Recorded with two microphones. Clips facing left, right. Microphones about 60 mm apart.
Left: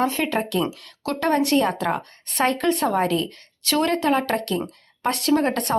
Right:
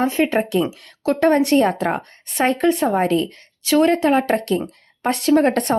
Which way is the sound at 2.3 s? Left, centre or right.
Right.